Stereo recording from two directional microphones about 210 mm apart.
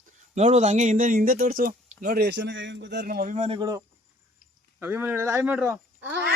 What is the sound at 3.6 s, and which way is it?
Speech, 15° right (ahead or behind).